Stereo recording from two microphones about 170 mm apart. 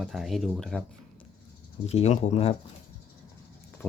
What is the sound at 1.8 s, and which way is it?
Speech, 40° left (ahead or behind).